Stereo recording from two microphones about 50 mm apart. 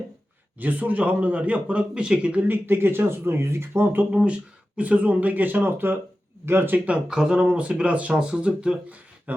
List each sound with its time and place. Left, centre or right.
0.6 s speech: right
2.5 s speech: right
4.1 s speech: right
6.7 s speech: right